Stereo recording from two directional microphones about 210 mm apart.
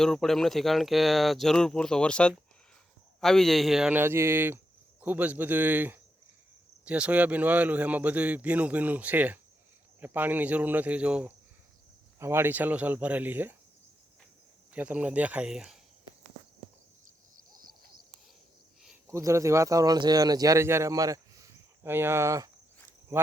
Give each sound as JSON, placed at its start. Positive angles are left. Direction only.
{"t": 0.0, "sound": "speech", "side_deg": 0}
{"t": 14.7, "sound": "speech", "side_deg": -5}
{"t": 17.3, "sound": "owl", "side_deg": -40}
{"t": 19.0, "sound": "speech", "side_deg": -15}